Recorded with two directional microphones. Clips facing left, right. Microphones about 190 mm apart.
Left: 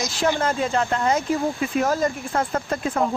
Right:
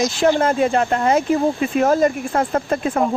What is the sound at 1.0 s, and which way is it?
Speech, 55° right (ahead or behind).